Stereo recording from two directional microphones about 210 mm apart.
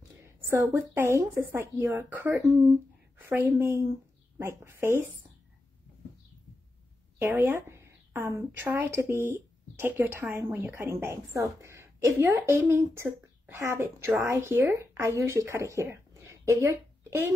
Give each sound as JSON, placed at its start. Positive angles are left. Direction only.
{"t": 0.5, "sound": "a woman's voice", "side_deg": -10}
{"t": 7.2, "sound": "a woman's voice", "side_deg": -10}